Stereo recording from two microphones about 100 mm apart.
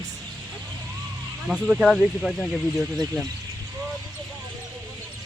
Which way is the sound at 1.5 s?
10° right (ahead or behind).